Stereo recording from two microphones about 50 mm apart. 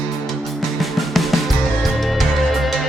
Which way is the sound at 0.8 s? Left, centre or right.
Centre.